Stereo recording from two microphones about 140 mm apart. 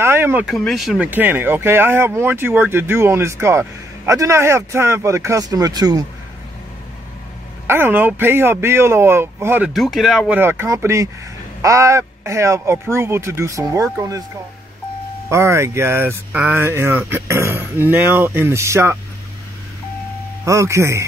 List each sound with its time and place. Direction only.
0.0 s speech: 15° right (ahead or behind)
0.5 s speech: centre (ahead or behind); by 6.0 s 30° right (ahead or behind)
7.6 s speech: 15° right (ahead or behind)
9.8 s speech: centre (ahead or behind)
10.4 s speech: 15° right (ahead or behind)
15.2 s speech: 20° right (ahead or behind)
20.4 s speech: 20° right (ahead or behind)